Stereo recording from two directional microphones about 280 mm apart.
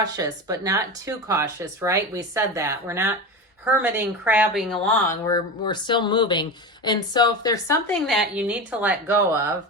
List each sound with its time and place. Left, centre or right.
0.0 s speech: centre
5.0 s speech: centre
8.0 s speech: centre